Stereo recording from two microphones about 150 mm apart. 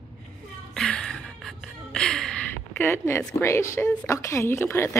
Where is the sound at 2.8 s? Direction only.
15° left (ahead or behind).